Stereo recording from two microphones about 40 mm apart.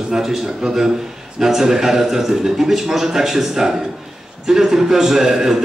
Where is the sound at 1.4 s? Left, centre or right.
Centre.